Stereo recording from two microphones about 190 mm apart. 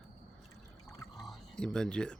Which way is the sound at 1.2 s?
5° left (ahead or behind).